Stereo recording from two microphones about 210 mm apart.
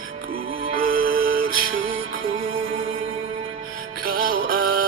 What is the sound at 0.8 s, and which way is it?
Music, 45° right (ahead or behind).